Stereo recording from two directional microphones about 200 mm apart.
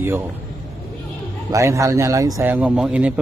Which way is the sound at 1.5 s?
15° right (ahead or behind).